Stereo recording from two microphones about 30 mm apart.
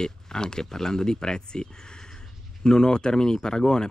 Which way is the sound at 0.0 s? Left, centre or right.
Left.